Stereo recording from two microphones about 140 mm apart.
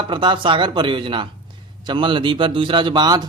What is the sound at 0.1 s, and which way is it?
A man's voice, 35° right (ahead or behind).